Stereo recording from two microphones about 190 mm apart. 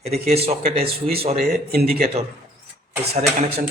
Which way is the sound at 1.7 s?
55° right (ahead or behind).